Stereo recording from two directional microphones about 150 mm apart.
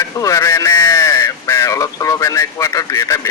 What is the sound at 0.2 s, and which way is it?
A man's voice, 20° left (ahead or behind).